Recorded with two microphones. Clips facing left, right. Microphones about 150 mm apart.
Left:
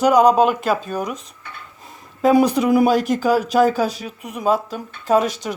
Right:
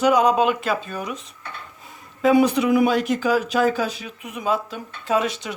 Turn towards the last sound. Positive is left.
turn(degrees=40)  # may be behind; listen again after turning